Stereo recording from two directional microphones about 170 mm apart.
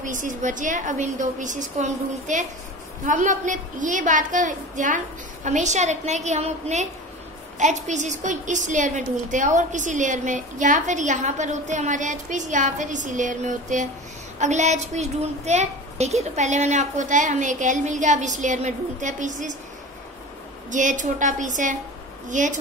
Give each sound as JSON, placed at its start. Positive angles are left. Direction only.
{"t": 0.0, "sound": "a woman's voice", "side_deg": -50}
{"t": 20.7, "sound": "a woman's voice", "side_deg": -50}